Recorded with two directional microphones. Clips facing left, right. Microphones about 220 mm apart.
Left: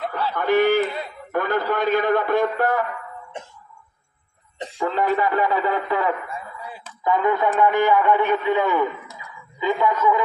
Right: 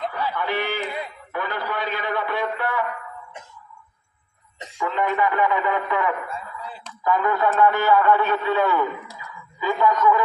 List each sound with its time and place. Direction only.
0.1 s chatter: 45° left (ahead or behind)
1.3 s a man's voice: 45° left (ahead or behind)
4.6 s a man's voice: 35° left (ahead or behind)
6.3 s a man's voice: 10° left (ahead or behind)